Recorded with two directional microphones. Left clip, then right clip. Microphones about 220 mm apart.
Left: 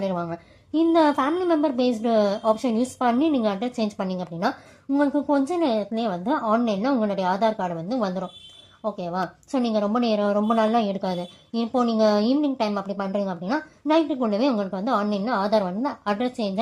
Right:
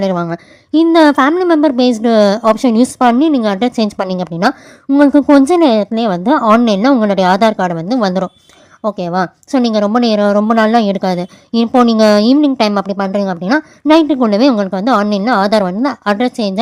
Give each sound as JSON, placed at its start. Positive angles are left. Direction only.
{"t": 0.0, "sound": "a woman's voice", "side_deg": -35}